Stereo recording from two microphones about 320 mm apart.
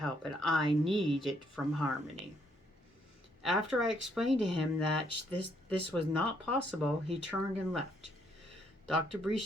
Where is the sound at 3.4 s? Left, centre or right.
Centre.